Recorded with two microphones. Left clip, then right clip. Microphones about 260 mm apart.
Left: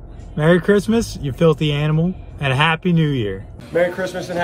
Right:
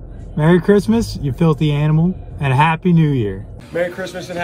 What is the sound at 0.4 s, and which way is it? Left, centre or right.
Speech, right.